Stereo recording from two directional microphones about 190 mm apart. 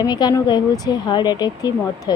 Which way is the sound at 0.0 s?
20° left (ahead or behind).